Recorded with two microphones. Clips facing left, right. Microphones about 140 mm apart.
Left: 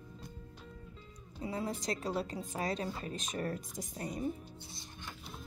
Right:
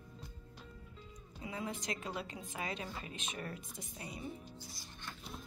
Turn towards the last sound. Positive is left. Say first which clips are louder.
# left 8 dB
turn(degrees=45)  # may be behind; listen again after turning